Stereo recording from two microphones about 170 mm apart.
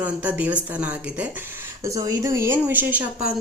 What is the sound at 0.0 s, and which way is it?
Speech, 10° right (ahead or behind).